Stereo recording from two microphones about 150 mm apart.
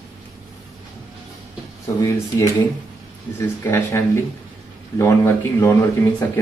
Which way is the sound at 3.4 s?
15° left (ahead or behind).